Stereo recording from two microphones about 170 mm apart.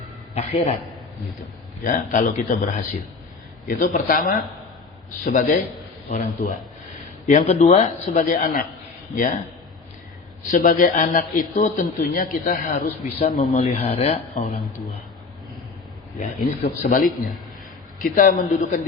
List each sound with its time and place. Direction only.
0.3 s a man's voice: 35° left (ahead or behind)
1.8 s speech: 50° left (ahead or behind)
3.7 s speech: 50° left (ahead or behind)
10.5 s speech: 50° left (ahead or behind)
13.6 s speech: 35° left (ahead or behind)
16.1 s speech: 50° left (ahead or behind)
18.0 s speech: 50° left (ahead or behind)